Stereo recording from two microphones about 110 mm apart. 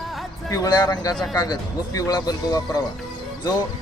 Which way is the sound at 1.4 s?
35° left (ahead or behind).